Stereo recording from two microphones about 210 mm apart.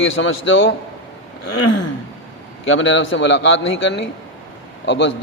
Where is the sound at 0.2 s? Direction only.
65° left (ahead or behind).